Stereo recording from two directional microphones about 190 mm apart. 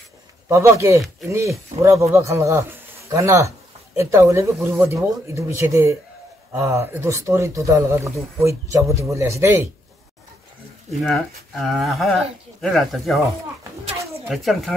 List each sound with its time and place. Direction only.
0.5 s a man's voice: 15° right (ahead or behind)
11.1 s speech: centre (ahead or behind)
14.2 s speech: centre (ahead or behind)